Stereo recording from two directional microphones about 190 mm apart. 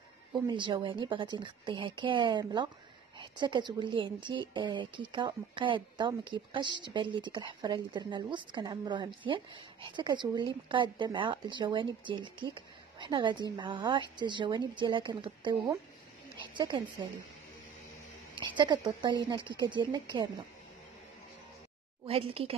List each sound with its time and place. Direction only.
0.3 s a woman's voice: 25° right (ahead or behind)
18.4 s a woman's voice: 25° right (ahead or behind)
22.0 s a woman's voice: 30° right (ahead or behind)